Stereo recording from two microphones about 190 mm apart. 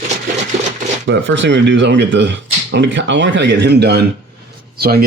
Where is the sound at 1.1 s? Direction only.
75° right (ahead or behind).